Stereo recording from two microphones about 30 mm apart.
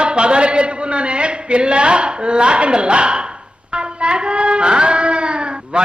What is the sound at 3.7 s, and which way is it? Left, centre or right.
Music, right.